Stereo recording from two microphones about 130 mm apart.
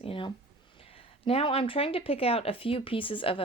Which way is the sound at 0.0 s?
40° left (ahead or behind).